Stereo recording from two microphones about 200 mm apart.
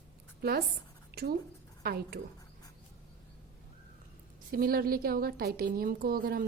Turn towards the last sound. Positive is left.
turn(degrees=-45)  # may be behind; listen again after turning